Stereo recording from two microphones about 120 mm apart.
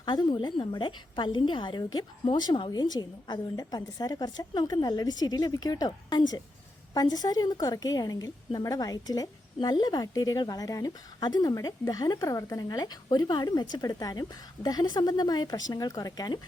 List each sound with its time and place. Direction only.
0.0 s a woman's voice: 40° left (ahead or behind)